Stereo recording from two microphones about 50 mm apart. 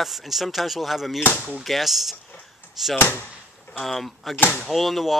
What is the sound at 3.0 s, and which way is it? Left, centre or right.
Speech, left.